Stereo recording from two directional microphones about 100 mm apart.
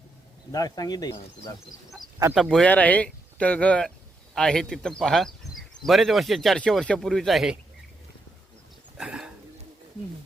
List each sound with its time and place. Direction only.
0.5 s speech: 40° left (ahead or behind)
2.0 s speech: 35° right (ahead or behind)
2.3 s speech: centre (ahead or behind)
2.6 s speech: 15° left (ahead or behind)
9.0 s a sound: 10° right (ahead or behind)